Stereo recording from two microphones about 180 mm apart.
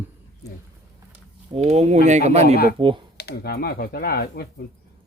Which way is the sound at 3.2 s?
60° left (ahead or behind).